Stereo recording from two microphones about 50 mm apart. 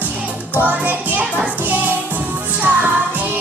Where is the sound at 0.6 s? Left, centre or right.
Right.